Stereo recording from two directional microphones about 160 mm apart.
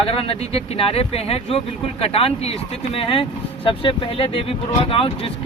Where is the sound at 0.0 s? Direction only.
35° left (ahead or behind).